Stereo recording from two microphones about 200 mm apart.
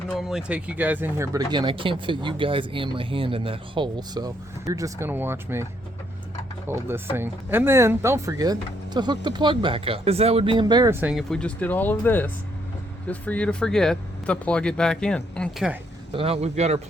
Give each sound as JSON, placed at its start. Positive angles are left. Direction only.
{"t": 0.1, "sound": "speech", "side_deg": 0}
{"t": 6.7, "sound": "speech", "side_deg": -10}
{"t": 11.0, "sound": "speech", "side_deg": 0}
{"t": 16.1, "sound": "speech", "side_deg": -30}